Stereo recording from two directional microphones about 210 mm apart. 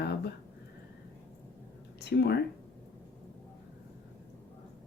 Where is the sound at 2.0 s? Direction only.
50° left (ahead or behind).